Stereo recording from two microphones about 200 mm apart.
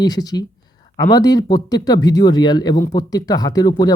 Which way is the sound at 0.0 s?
20° left (ahead or behind).